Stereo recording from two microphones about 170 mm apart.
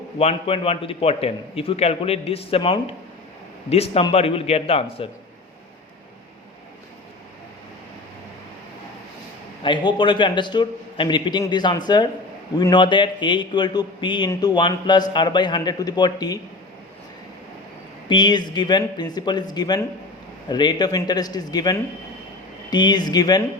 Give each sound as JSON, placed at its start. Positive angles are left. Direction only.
{"t": 0.2, "sound": "a man's voice", "side_deg": 35}
{"t": 9.6, "sound": "a man's voice", "side_deg": 30}
{"t": 18.1, "sound": "a man's voice", "side_deg": 25}